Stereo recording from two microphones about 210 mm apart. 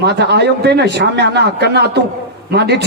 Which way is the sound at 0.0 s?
50° right (ahead or behind).